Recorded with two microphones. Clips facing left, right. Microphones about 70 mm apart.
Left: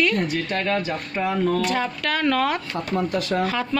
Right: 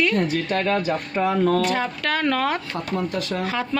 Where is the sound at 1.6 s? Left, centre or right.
Right.